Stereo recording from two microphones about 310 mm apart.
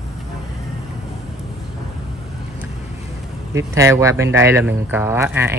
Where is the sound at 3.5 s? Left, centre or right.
Centre.